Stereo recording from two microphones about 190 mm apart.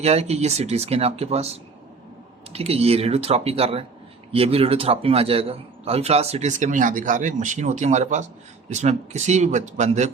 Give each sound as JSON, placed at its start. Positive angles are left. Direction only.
{"t": 0.0, "sound": "a man's voice", "side_deg": -35}